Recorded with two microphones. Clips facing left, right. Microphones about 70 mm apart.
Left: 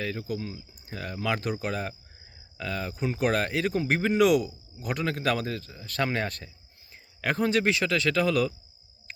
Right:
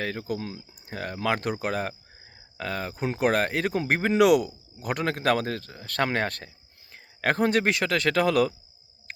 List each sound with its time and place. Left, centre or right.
0.0 s a man's voice: right